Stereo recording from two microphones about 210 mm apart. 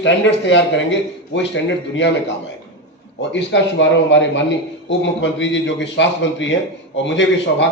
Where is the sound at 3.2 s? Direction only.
60° left (ahead or behind).